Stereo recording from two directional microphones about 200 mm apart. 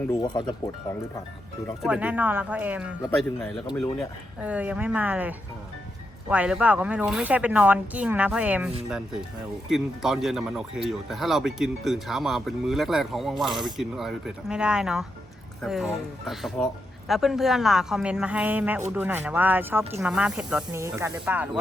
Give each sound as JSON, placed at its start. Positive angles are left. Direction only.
{"t": 0.1, "sound": "speech", "side_deg": 20}
{"t": 1.8, "sound": "speech", "side_deg": -5}
{"t": 3.9, "sound": "speech", "side_deg": -5}